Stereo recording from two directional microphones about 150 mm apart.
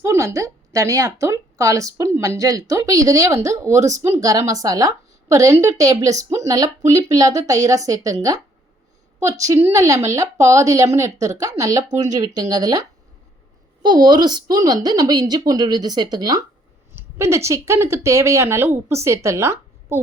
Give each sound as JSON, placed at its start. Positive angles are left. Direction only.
{"t": 0.0, "sound": "a woman's voice", "side_deg": -20}